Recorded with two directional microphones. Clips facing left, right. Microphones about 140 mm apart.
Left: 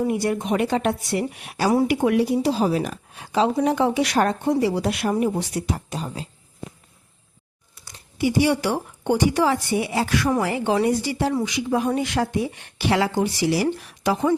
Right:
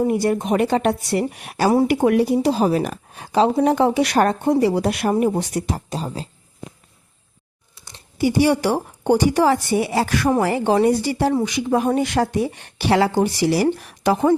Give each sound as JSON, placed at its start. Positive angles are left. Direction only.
{"t": 0.1, "sound": "a woman's voice", "side_deg": -35}
{"t": 7.9, "sound": "a sound", "side_deg": -25}
{"t": 8.4, "sound": "a woman's voice", "side_deg": -40}